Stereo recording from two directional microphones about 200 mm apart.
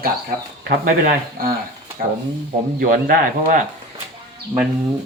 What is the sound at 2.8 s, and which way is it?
Speech, 50° right (ahead or behind).